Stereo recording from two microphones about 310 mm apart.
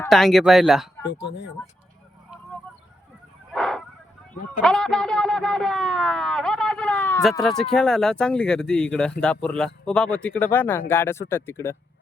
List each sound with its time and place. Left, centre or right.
0.0 s speech: centre
1.0 s speech: left
3.5 s bow-wow: centre
4.6 s speech: centre